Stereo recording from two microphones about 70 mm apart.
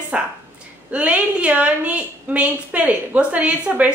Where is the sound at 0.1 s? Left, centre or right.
Centre.